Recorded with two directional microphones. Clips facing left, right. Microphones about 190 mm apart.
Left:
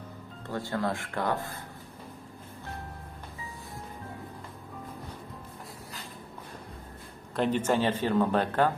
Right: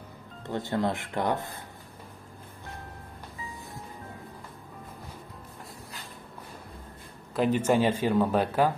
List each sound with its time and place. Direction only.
0.5 s speech: 20° right (ahead or behind)
7.3 s speech: 5° right (ahead or behind)